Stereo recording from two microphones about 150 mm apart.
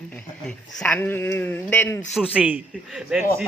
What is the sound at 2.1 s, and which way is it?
A man's voice, 5° right (ahead or behind).